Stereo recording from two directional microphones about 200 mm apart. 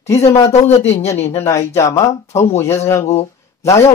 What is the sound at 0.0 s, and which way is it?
Speech, 15° left (ahead or behind).